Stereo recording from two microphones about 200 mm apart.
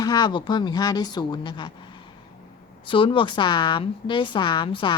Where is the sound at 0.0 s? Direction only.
20° left (ahead or behind).